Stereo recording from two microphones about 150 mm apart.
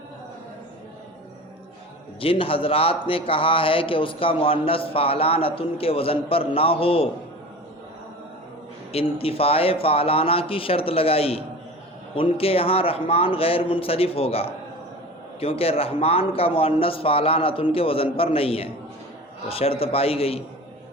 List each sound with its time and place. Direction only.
2.2 s a man's voice: 40° left (ahead or behind)
8.9 s a man's voice: 40° left (ahead or behind)